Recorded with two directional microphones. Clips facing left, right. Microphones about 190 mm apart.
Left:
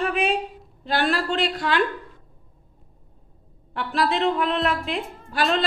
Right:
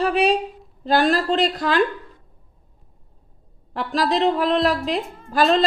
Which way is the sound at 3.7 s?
35° right (ahead or behind).